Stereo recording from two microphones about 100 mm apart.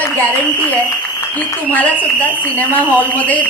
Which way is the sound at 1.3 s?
15° left (ahead or behind).